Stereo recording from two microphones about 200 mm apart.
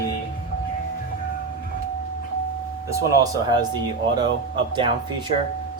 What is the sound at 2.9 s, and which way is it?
Speech, 20° right (ahead or behind).